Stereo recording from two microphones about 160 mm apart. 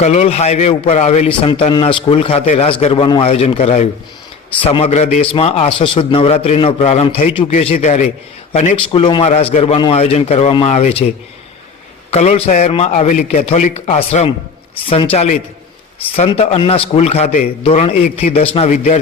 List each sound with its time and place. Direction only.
0.0 s a man's voice: 45° left (ahead or behind)
12.1 s a man's voice: 40° left (ahead or behind)